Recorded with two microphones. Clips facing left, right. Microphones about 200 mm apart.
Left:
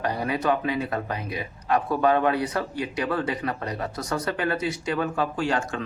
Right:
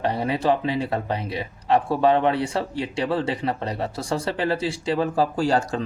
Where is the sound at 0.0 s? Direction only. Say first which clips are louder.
Right 3 dB; 25° right (ahead or behind).